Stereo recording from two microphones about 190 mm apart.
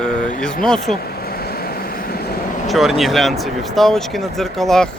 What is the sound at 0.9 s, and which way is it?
Vehicle, 55° left (ahead or behind).